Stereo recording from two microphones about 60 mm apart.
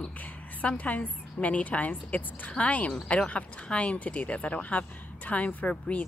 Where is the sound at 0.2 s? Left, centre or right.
Left.